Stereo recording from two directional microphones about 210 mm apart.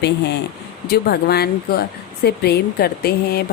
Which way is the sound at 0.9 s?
50° left (ahead or behind).